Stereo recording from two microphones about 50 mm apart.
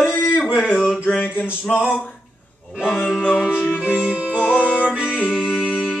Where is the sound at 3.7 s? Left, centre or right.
Left.